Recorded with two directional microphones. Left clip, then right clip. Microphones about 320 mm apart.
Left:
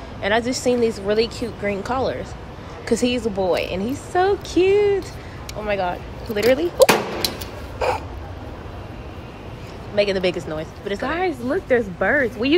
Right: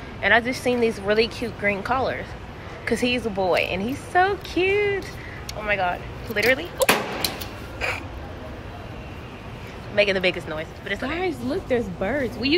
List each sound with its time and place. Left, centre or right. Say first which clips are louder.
0.2 s a woman's voice: right 1 dB; centre
9.9 s speech: left 1 dB; centre